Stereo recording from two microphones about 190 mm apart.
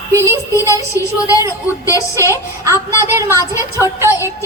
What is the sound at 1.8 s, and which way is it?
Speech, 15° left (ahead or behind).